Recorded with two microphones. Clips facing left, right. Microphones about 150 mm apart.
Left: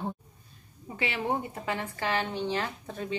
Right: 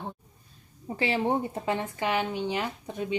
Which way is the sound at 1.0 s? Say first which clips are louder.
Right 4 dB; 30° right (ahead or behind).